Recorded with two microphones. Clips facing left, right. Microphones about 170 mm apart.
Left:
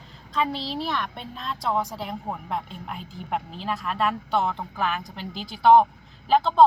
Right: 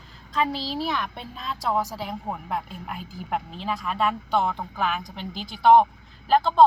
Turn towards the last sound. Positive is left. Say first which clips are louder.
# even
turn(degrees=0)  # may be behind; listen again after turning